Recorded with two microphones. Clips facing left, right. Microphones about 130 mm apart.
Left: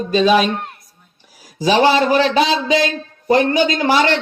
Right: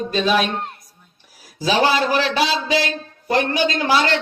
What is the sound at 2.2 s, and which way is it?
Speech, 5° right (ahead or behind).